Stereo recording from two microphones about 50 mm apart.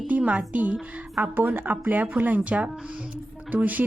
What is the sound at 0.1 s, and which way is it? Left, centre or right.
A woman's voice, right.